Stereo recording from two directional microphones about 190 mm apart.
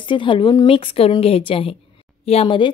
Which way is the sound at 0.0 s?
25° left (ahead or behind).